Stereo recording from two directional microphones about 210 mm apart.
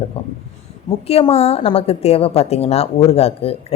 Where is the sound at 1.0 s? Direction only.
30° left (ahead or behind).